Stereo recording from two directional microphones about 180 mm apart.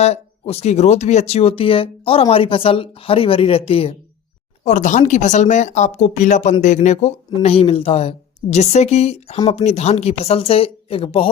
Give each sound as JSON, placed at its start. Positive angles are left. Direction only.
{"t": 0.0, "sound": "speech", "side_deg": 35}
{"t": 4.6, "sound": "speech", "side_deg": 45}